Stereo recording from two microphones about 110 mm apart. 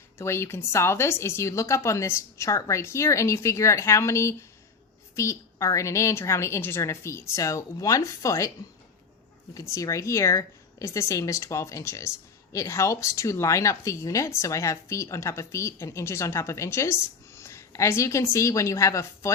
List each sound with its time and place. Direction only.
0.2 s speech: 25° left (ahead or behind)
9.6 s speech: 30° left (ahead or behind)